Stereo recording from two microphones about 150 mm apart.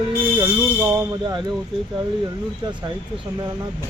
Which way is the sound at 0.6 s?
15° right (ahead or behind).